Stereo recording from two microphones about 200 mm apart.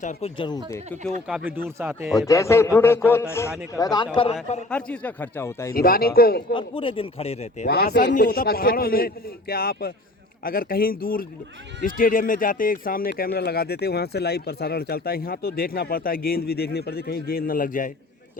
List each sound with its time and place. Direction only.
0.0 s speech: 35° left (ahead or behind)
1.3 s speech: 5° right (ahead or behind)
2.1 s a man's voice: 15° left (ahead or behind)
4.7 s a man's voice: 5° left (ahead or behind)
5.7 s speech: 45° left (ahead or behind)
6.5 s speech: 25° left (ahead or behind)
7.9 s speech: 45° left (ahead or behind)